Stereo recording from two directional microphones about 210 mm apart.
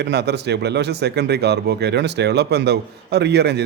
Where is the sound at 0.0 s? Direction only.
50° right (ahead or behind).